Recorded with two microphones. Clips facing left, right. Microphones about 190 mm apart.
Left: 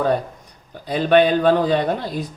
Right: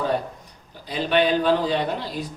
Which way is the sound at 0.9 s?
50° left (ahead or behind).